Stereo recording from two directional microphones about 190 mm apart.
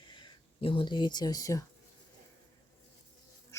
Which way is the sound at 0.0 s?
25° left (ahead or behind).